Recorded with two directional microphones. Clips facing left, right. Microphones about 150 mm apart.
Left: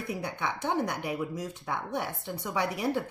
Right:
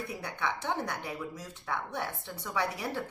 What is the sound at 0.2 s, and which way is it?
Speech, 15° left (ahead or behind).